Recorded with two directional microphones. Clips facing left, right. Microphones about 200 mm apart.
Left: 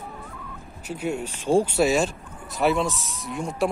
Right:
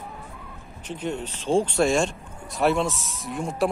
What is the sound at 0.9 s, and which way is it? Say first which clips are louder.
Speech: left 2 dB; 10° left (ahead or behind).